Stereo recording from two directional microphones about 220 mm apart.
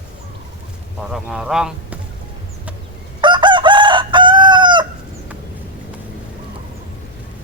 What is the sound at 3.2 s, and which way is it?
Chicken, 20° right (ahead or behind).